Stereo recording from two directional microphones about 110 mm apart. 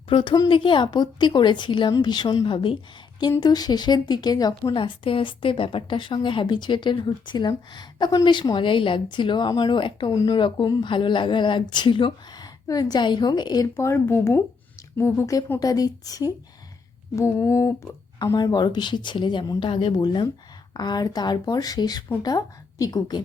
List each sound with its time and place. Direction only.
0.1 s a woman's voice: 45° left (ahead or behind)
3.4 s a woman's voice: 40° left (ahead or behind)
13.7 s speech: 25° left (ahead or behind)
18.3 s a woman's voice: 40° left (ahead or behind)